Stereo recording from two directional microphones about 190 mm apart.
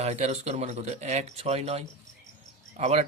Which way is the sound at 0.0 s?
35° right (ahead or behind).